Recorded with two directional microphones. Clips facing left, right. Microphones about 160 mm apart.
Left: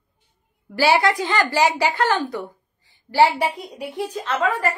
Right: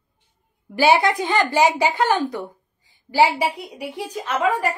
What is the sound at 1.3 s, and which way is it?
A woman's voice, 20° right (ahead or behind).